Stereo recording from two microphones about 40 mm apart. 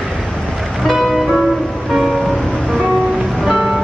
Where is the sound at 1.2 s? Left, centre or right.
Centre.